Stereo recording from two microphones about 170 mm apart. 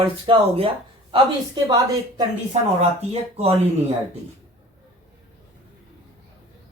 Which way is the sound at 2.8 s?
40° right (ahead or behind).